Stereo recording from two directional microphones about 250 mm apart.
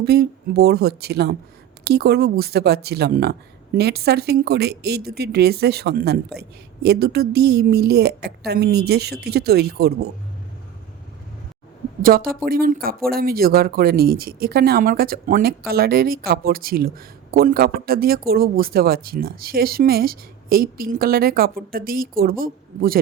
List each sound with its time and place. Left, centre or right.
0.0 s speech: right
12.0 s speech: right